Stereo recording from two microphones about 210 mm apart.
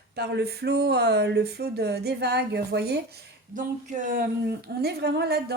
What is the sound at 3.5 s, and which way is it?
A woman's voice, 35° right (ahead or behind).